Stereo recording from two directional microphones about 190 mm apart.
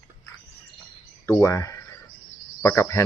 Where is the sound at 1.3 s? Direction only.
15° left (ahead or behind).